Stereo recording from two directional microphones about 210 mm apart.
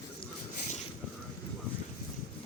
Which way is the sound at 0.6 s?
35° left (ahead or behind).